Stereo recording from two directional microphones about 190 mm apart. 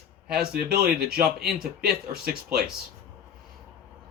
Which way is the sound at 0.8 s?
55° right (ahead or behind).